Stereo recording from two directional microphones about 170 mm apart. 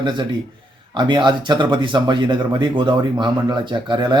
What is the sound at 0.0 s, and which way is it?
Speech, 30° right (ahead or behind).